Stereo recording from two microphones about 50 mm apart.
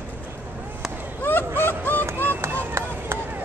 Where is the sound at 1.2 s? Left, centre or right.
Left.